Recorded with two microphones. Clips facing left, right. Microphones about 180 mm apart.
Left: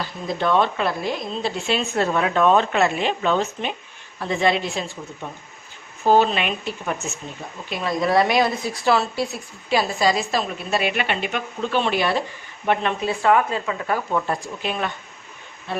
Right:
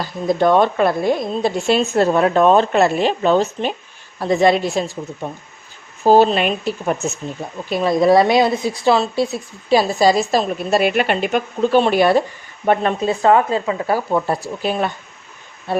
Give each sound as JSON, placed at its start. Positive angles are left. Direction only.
{"t": 0.0, "sound": "a woman's voice", "side_deg": -45}
{"t": 9.6, "sound": "a woman's voice", "side_deg": -35}